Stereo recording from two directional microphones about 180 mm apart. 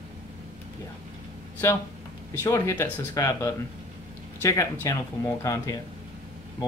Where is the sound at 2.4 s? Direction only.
15° left (ahead or behind).